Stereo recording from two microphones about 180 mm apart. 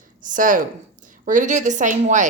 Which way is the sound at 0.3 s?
50° right (ahead or behind).